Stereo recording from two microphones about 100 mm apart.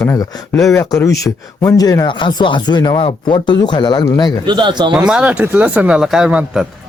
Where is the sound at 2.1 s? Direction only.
50° left (ahead or behind).